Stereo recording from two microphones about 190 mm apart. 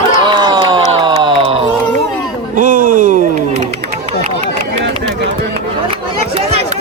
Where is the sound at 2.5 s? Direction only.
45° right (ahead or behind).